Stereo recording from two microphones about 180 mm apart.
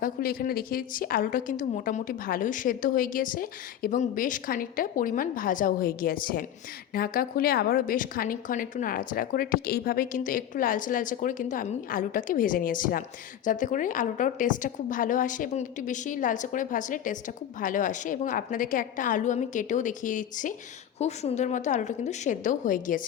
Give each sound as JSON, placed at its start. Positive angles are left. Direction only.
{"t": 0.0, "sound": "a woman's voice", "side_deg": 55}